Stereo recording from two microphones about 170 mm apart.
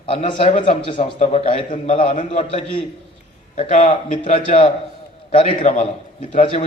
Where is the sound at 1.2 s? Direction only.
40° left (ahead or behind).